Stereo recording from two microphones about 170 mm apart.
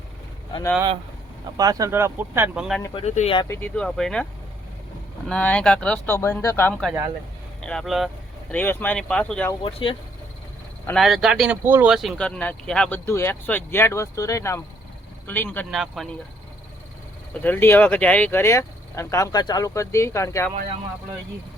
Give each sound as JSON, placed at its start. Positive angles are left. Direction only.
{"t": 1.5, "sound": "speech", "side_deg": -20}
{"t": 2.9, "sound": "speech", "side_deg": 40}
{"t": 3.5, "sound": "speech", "side_deg": 10}
{"t": 5.3, "sound": "speech", "side_deg": 5}
{"t": 8.5, "sound": "speech", "side_deg": 10}
{"t": 10.9, "sound": "speech", "side_deg": 0}
{"t": 15.7, "sound": "speech", "side_deg": 0}
{"t": 17.4, "sound": "speech", "side_deg": 10}